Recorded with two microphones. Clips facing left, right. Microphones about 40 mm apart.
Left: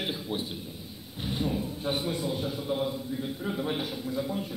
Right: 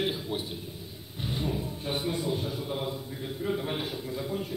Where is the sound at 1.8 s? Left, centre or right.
Left.